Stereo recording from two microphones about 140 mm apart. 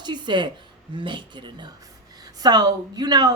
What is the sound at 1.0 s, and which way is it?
Speech, 35° right (ahead or behind).